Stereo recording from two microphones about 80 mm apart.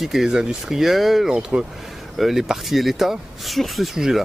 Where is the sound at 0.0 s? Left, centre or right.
Centre.